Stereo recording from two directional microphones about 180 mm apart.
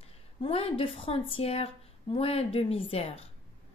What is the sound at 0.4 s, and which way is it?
Speech, 30° left (ahead or behind).